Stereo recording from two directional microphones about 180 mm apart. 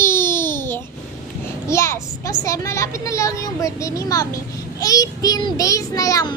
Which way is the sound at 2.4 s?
15° left (ahead or behind).